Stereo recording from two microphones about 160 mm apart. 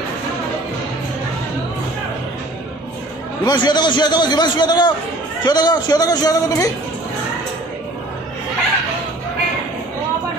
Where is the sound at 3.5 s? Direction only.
25° left (ahead or behind).